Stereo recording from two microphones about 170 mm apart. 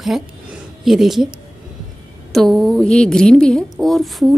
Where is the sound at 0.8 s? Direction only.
Centre (ahead or behind).